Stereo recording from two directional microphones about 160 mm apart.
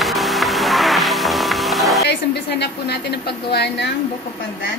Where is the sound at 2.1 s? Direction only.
90° left.